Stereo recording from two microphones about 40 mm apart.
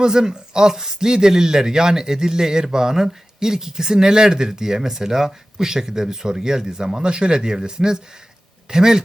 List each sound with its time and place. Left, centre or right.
0.0 s speech: centre